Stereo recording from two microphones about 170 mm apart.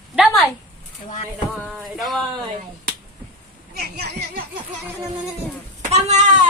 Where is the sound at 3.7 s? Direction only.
70° right (ahead or behind).